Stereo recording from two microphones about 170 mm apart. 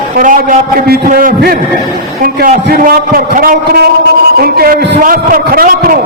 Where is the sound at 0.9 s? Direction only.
60° right (ahead or behind).